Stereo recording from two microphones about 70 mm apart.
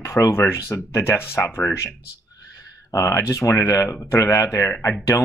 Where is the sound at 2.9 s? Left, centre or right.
Left.